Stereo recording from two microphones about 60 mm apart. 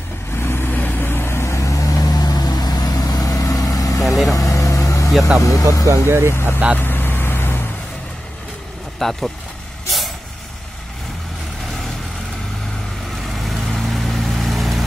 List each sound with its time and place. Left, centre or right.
0.4 s vehicle: left
4.0 s vehicle: centre
4.3 s vehicle: left
5.4 s speech: left
5.9 s speech: right
6.8 s vehicle: left
9.0 s speech: centre
9.8 s vehicle: centre
13.4 s vehicle: centre